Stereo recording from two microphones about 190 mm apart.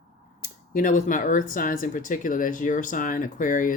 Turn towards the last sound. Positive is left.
turn(degrees=45)  # may be behind; listen again after turning